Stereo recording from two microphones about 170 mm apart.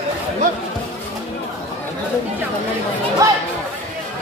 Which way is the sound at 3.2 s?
20° right (ahead or behind).